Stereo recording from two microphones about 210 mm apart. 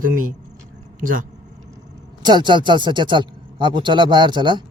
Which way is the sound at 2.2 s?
20° right (ahead or behind).